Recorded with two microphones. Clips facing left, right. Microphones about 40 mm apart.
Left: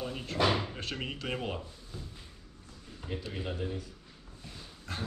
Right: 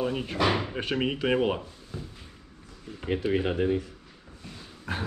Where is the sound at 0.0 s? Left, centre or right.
Right.